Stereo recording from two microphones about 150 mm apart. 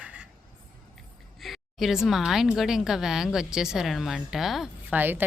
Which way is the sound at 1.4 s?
Centre (ahead or behind).